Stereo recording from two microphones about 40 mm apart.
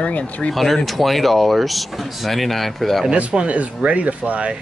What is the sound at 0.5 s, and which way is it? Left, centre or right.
Speech, centre.